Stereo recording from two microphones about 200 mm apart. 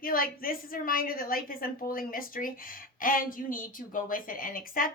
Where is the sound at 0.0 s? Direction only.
45° left (ahead or behind).